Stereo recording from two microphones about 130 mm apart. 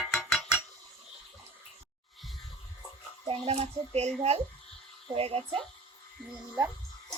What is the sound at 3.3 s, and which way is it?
Speech, 45° right (ahead or behind).